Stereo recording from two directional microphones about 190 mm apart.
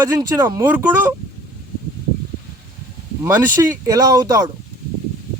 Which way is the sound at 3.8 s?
20° right (ahead or behind).